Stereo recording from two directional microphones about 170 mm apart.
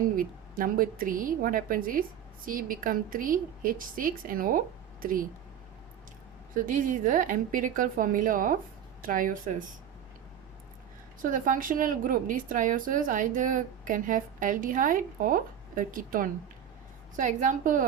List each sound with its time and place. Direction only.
0.2 s a woman's voice: 55° right (ahead or behind)
6.7 s a woman's voice: 50° right (ahead or behind)
11.2 s a woman's voice: 50° right (ahead or behind)